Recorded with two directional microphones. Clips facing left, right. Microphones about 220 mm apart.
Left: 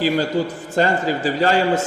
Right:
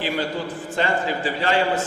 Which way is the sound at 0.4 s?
45° left (ahead or behind).